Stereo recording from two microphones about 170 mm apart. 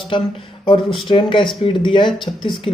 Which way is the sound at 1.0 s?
30° left (ahead or behind).